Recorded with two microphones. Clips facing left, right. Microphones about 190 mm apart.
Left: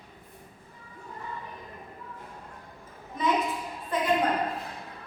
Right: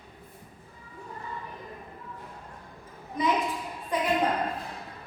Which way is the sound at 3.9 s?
15° right (ahead or behind).